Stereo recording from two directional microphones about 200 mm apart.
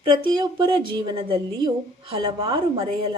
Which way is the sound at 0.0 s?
25° right (ahead or behind).